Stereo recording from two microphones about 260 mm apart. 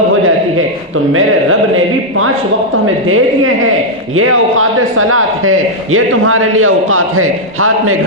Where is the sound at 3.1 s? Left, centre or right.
Right.